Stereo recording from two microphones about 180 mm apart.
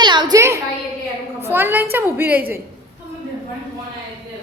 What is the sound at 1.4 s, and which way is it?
A woman's voice, 10° right (ahead or behind).